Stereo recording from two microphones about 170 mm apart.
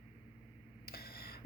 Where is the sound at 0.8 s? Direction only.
65° left (ahead or behind).